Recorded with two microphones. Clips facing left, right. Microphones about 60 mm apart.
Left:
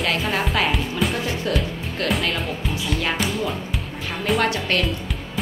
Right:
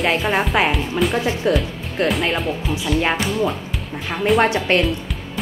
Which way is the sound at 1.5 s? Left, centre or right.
Right.